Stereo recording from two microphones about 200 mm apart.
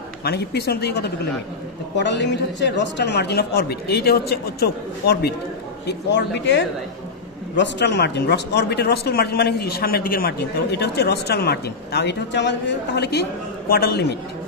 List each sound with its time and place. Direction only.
0.2 s speech: 55° left (ahead or behind)